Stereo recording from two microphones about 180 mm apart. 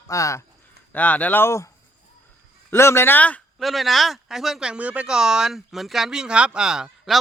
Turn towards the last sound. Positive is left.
turn(degrees=-5)  # may be behind; listen again after turning